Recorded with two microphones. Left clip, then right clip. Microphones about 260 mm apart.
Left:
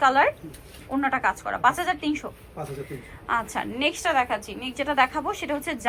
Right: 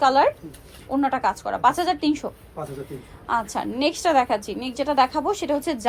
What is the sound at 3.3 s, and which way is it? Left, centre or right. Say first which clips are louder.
A woman's voice: right 2 dB; centre.